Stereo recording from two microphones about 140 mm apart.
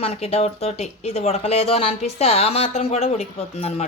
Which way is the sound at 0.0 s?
45° left (ahead or behind).